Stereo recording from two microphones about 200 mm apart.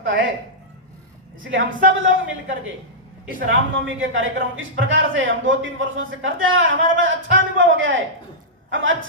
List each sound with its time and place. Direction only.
0.0 s speech: 70° right (ahead or behind)
1.5 s a man's voice: 70° right (ahead or behind)
3.7 s a man's voice: 75° right (ahead or behind)